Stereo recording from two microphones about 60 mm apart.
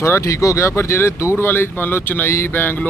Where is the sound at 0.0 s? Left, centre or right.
Left.